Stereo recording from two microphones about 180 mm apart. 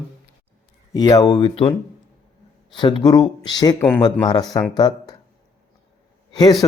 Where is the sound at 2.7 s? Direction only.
25° left (ahead or behind).